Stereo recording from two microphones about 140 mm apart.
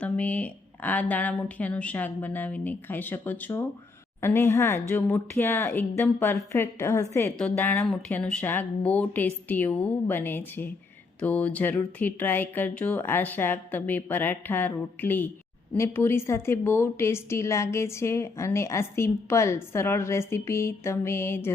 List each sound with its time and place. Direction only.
0.0 s a woman's voice: 10° left (ahead or behind)